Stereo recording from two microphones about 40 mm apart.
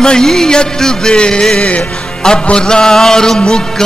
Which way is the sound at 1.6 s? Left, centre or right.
Left.